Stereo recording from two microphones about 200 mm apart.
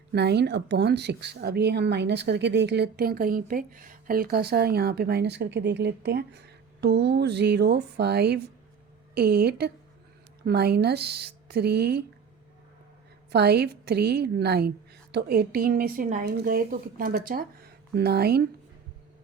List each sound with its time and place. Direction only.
0.1 s a woman's voice: 55° right (ahead or behind)
13.3 s a woman's voice: 55° right (ahead or behind)